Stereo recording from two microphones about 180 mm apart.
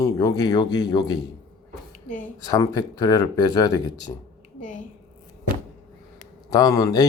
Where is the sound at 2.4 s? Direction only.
20° left (ahead or behind).